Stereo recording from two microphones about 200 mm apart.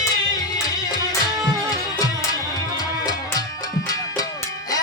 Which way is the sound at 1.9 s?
20° left (ahead or behind).